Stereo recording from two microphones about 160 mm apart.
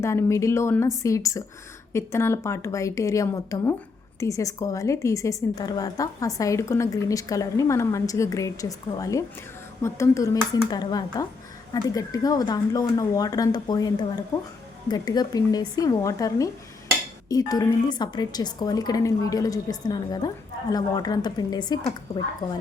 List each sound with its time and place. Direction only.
0.0 s a woman's voice: 15° left (ahead or behind)